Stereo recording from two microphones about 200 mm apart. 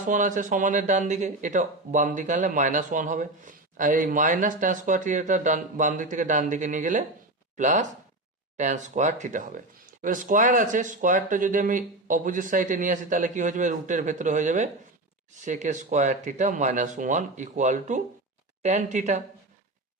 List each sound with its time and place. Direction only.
0.0 s speech: 40° right (ahead or behind)